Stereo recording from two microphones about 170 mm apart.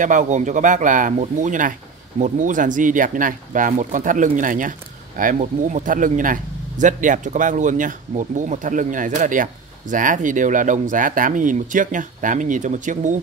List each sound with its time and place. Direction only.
0.0 s speech: 50° right (ahead or behind)